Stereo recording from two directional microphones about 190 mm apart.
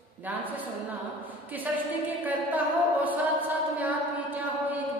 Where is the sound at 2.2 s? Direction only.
10° right (ahead or behind).